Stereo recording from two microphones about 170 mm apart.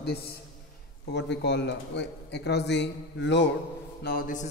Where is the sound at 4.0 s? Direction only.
60° left (ahead or behind).